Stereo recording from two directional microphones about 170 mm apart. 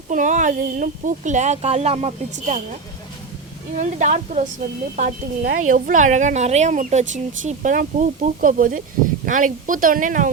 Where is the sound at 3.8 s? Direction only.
45° right (ahead or behind).